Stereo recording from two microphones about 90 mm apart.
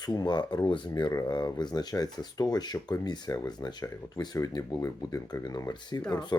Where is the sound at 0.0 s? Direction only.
50° left (ahead or behind).